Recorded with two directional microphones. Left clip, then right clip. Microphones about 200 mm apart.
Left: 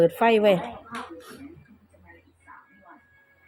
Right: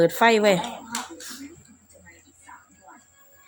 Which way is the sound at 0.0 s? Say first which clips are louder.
Right 1 dB; 10° right (ahead or behind).